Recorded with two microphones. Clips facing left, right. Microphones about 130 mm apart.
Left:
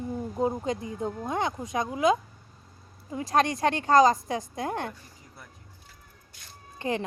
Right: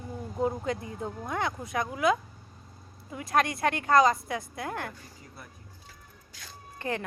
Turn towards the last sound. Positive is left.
turn(degrees=20)  # may be behind; listen again after turning